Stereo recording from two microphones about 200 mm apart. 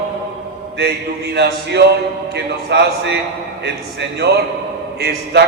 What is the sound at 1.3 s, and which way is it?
A man's voice, 55° right (ahead or behind).